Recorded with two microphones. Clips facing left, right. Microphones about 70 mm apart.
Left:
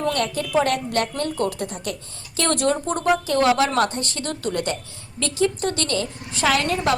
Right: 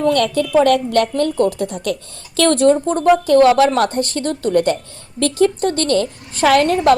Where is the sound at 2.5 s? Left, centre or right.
Right.